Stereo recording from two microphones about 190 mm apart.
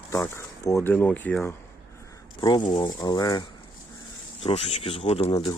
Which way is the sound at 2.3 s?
25° left (ahead or behind).